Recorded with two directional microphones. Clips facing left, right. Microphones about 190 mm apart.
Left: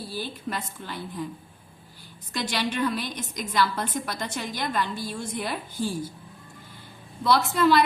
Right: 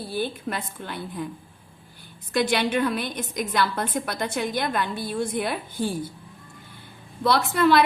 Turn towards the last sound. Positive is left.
turn(degrees=-60)  # may be behind; listen again after turning